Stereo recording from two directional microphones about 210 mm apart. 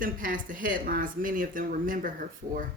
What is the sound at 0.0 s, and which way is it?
Speech, 40° right (ahead or behind).